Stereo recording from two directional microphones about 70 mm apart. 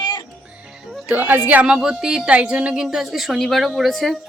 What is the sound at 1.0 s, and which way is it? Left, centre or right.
Speech, right.